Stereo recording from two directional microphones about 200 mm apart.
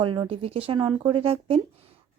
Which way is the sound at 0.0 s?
25° right (ahead or behind).